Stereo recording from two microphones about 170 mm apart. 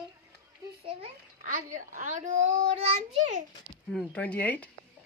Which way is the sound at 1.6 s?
50° right (ahead or behind).